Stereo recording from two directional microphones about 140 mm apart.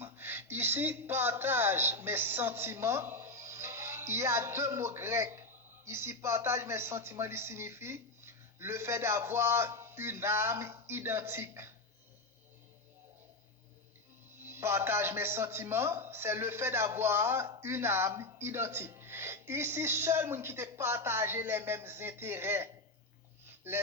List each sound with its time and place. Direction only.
0.0 s speech: 15° right (ahead or behind)
14.4 s speech: 15° right (ahead or behind)